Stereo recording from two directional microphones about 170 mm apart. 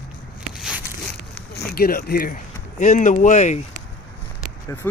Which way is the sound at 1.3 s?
65° left (ahead or behind).